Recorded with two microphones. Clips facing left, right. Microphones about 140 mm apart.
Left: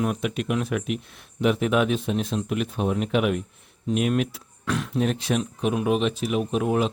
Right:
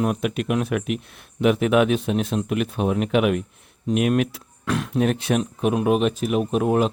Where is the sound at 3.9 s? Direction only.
60° right (ahead or behind).